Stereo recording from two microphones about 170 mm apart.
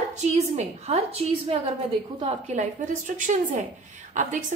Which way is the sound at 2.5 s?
50° right (ahead or behind).